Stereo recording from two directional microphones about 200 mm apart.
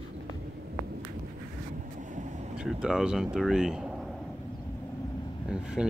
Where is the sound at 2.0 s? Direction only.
40° right (ahead or behind).